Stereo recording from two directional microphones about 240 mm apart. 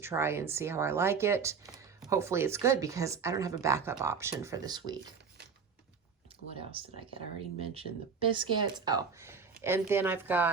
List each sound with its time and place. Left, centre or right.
0.0 s speech: centre
6.6 s speech: right